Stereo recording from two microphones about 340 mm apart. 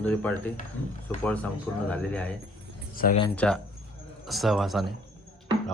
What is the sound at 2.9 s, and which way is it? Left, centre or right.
Speech, left.